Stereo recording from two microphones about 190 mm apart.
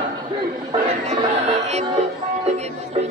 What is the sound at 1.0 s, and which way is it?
Music, 35° right (ahead or behind).